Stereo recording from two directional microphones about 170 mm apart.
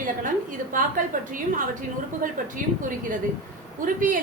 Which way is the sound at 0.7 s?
55° right (ahead or behind).